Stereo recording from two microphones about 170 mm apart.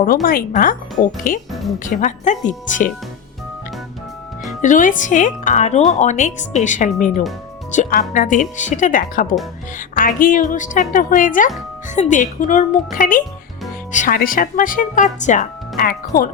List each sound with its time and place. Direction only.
0.0 s speech: 55° left (ahead or behind)
4.6 s speech: 50° left (ahead or behind)
15.8 s speech: 60° left (ahead or behind)